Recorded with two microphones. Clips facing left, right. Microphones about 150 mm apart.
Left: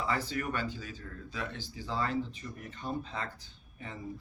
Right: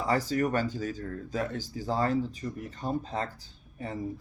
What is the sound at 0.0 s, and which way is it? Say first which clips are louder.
Speech: right 6 dB; 40° right (ahead or behind).